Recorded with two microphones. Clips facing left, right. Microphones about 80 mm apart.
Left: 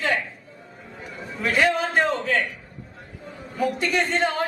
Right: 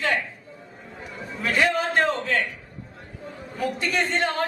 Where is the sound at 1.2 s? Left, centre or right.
Centre.